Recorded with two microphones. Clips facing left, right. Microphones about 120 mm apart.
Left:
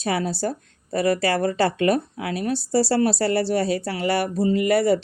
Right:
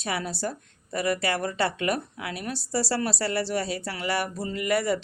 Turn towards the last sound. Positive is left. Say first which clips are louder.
# left 7 dB
turn(degrees=35)  # may be behind; listen again after turning